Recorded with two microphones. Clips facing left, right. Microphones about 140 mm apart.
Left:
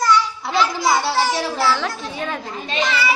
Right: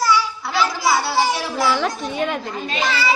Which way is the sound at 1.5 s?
10° right (ahead or behind).